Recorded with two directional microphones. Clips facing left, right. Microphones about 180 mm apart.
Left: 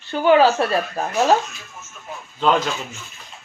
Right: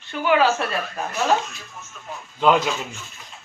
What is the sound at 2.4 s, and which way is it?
Speech, 10° right (ahead or behind).